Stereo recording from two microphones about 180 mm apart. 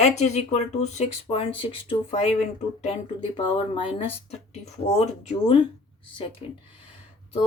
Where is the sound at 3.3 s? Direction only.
25° left (ahead or behind).